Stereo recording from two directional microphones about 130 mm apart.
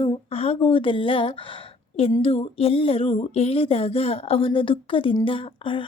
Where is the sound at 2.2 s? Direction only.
45° left (ahead or behind).